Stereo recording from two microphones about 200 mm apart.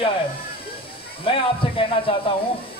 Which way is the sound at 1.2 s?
25° left (ahead or behind).